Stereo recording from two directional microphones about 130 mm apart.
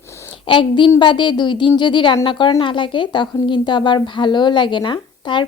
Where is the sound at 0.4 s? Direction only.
40° left (ahead or behind).